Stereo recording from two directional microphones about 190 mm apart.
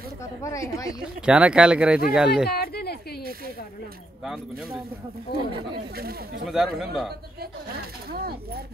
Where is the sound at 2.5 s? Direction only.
55° left (ahead or behind).